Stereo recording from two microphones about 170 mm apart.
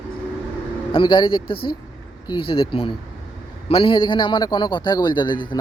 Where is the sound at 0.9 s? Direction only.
30° left (ahead or behind).